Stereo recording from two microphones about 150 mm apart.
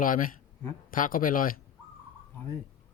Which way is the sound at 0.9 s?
65° left (ahead or behind).